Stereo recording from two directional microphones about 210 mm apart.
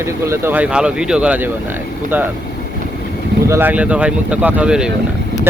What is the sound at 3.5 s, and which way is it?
Speech, 10° right (ahead or behind).